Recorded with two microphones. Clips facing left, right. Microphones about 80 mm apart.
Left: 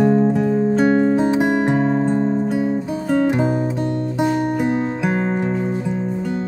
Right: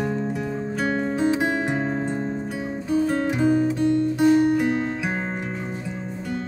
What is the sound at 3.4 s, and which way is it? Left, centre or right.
Music, left.